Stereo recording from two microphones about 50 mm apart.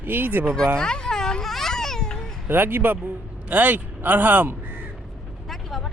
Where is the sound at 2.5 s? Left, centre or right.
Right.